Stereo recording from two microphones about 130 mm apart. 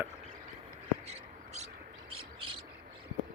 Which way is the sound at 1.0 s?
55° right (ahead or behind).